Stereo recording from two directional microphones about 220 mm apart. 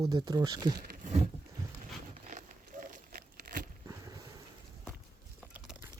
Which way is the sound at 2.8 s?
40° right (ahead or behind).